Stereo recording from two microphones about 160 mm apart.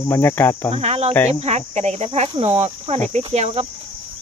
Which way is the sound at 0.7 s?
40° right (ahead or behind).